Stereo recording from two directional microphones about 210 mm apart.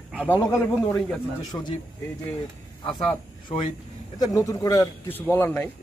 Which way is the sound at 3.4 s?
25° left (ahead or behind).